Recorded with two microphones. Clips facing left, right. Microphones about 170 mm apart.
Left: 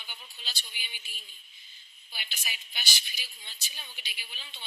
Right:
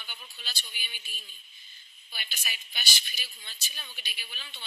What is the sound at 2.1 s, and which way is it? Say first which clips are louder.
Speech: right 1 dB; 15° left (ahead or behind).